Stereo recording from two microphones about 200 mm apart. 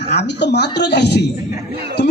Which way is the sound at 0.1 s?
60° left (ahead or behind).